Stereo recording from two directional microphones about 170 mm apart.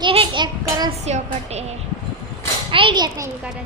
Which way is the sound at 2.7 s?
30° right (ahead or behind).